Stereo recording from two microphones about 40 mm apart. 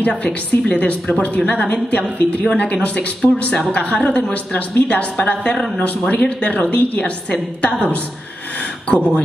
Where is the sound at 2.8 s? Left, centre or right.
Left.